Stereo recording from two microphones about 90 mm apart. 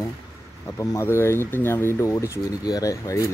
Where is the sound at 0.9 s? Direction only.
30° left (ahead or behind).